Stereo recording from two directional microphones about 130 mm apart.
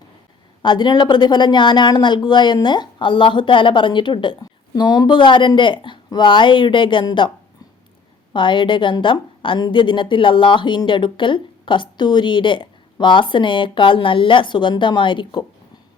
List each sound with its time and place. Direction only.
0.6 s a woman's voice: 35° left (ahead or behind)
8.3 s a woman's voice: 40° left (ahead or behind)